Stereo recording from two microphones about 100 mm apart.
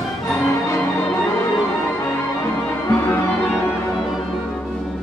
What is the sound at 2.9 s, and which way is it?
Music, 20° left (ahead or behind).